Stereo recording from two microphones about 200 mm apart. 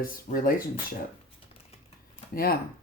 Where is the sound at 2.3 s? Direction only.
50° left (ahead or behind).